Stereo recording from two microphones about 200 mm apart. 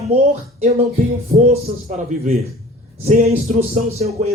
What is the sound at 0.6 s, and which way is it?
Music, 35° right (ahead or behind).